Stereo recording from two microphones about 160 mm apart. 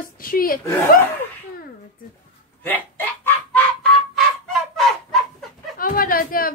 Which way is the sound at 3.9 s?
Centre (ahead or behind).